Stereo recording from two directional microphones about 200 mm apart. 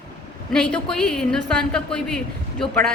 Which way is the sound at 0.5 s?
5° left (ahead or behind).